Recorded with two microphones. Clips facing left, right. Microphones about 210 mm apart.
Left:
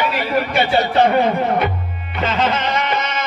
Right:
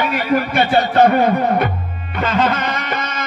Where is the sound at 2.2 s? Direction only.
50° right (ahead or behind).